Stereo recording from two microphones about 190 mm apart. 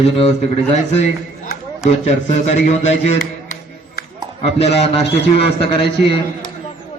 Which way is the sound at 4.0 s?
55° left (ahead or behind).